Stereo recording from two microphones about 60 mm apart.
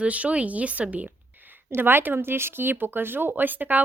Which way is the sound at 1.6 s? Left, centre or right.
Right.